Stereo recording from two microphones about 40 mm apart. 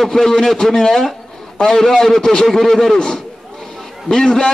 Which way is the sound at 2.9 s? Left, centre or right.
Centre.